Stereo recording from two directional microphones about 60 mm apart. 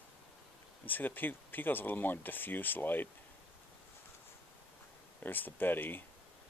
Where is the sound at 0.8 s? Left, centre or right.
Left.